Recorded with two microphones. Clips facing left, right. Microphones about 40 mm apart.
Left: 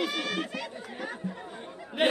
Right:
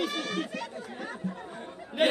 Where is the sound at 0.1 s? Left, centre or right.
Left.